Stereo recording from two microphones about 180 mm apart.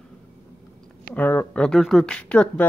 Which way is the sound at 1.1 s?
10° left (ahead or behind).